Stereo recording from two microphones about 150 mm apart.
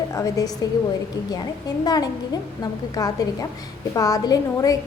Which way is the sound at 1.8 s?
25° left (ahead or behind).